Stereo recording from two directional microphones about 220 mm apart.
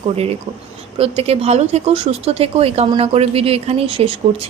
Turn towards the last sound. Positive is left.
turn(degrees=-25)  # may be behind; listen again after turning